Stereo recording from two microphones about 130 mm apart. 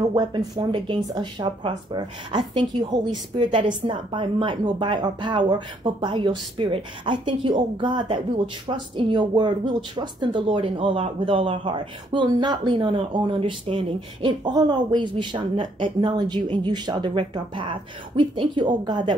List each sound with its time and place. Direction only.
0.1 s speech: 30° right (ahead or behind)